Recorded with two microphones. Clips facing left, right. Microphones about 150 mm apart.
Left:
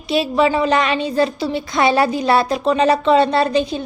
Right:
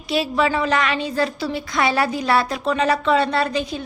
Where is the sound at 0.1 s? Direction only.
20° left (ahead or behind).